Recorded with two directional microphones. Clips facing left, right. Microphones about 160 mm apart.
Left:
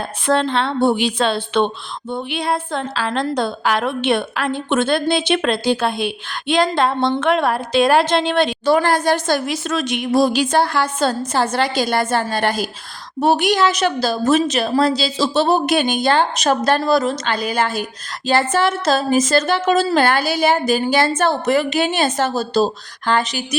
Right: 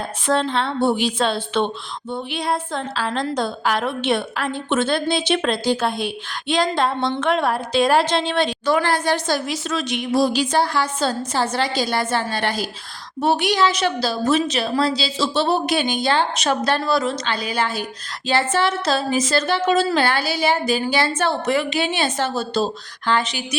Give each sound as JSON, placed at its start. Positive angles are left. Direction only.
{"t": 0.3, "sound": "a woman's voice", "side_deg": 65}
{"t": 2.0, "sound": "a woman's voice", "side_deg": 55}
{"t": 8.6, "sound": "a woman's voice", "side_deg": 40}